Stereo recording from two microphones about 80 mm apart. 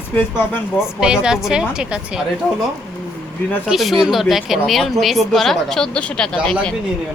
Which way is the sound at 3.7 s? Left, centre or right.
Centre.